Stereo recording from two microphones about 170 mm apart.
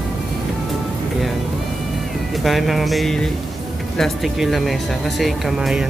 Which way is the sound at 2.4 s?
Centre (ahead or behind).